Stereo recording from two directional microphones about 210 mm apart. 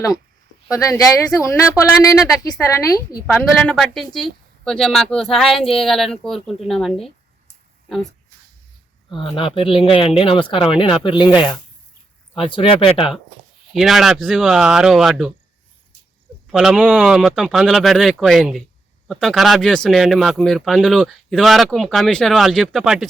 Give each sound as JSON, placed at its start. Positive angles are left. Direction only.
{"t": 0.7, "sound": "speech", "side_deg": 15}
{"t": 3.2, "sound": "speech", "side_deg": 5}
{"t": 9.1, "sound": "speech", "side_deg": 25}
{"t": 13.7, "sound": "speech", "side_deg": 0}
{"t": 16.5, "sound": "speech", "side_deg": 0}